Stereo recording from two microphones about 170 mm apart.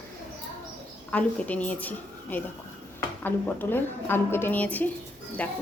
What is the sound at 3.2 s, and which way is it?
A woman's voice, 10° left (ahead or behind).